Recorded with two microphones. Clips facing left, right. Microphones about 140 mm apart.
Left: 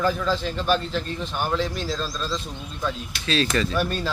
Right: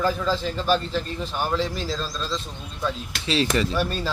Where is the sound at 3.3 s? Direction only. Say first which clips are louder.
Right 1 dB; 20° right (ahead or behind).